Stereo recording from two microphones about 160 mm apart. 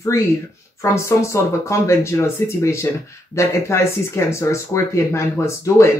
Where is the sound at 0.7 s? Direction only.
20° left (ahead or behind).